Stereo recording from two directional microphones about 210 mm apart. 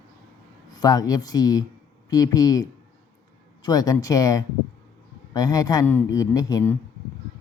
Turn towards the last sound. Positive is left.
turn(degrees=15)  # may be behind; listen again after turning